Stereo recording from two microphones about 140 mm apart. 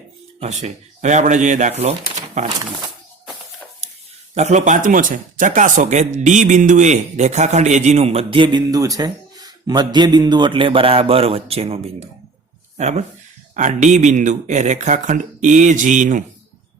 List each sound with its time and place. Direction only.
0.3 s speech: 55° right (ahead or behind)
4.4 s speech: 55° right (ahead or behind)
13.5 s speech: 65° right (ahead or behind)